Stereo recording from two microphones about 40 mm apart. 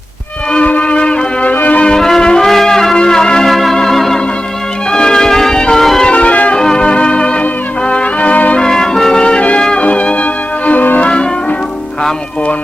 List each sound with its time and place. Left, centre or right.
0.6 s music: left
1.5 s music: left
2.0 s music: centre
3.4 s organ: centre
4.9 s music: centre
6.1 s music: left
6.6 s music: centre
6.8 s organ: left
7.9 s music: left
8.5 s music: centre
9.2 s music: left
9.8 s music: left
10.7 s music: left
11.0 s music: left